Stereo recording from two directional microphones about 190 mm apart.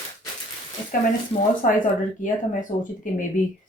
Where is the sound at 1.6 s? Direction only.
45° left (ahead or behind).